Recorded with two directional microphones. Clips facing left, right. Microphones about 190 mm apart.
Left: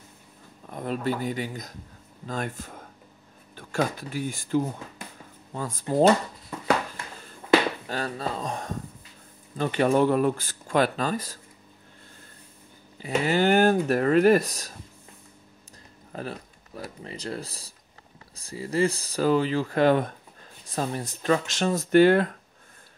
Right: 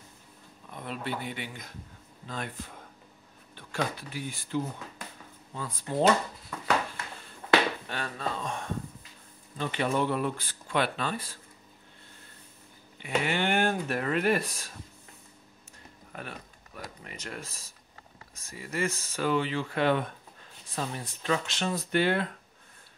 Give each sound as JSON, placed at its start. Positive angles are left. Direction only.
{"t": 0.7, "sound": "speech", "side_deg": 45}
{"t": 7.9, "sound": "speech", "side_deg": 35}
{"t": 12.9, "sound": "speech", "side_deg": 35}
{"t": 16.1, "sound": "speech", "side_deg": 35}